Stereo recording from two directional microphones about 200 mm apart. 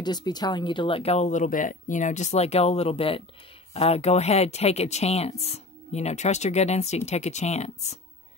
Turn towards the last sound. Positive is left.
turn(degrees=35)  # may be behind; listen again after turning